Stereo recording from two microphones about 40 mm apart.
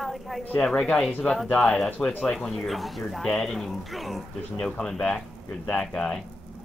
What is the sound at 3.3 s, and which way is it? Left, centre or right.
Speech, centre.